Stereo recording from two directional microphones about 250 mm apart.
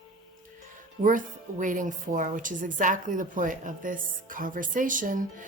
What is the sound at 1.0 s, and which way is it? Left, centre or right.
A woman's voice, right.